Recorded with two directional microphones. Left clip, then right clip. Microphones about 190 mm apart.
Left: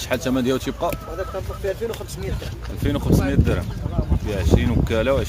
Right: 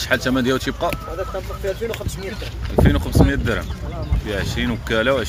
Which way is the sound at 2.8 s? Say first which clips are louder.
Right 5 dB; 10° left (ahead or behind).